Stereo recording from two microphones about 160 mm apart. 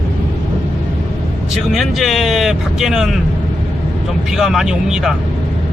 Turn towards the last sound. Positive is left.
turn(degrees=-5)  # may be behind; listen again after turning